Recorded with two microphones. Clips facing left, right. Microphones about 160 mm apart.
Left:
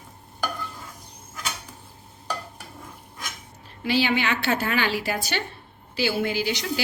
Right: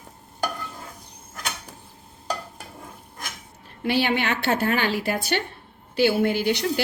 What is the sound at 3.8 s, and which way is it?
A woman's voice, 55° right (ahead or behind).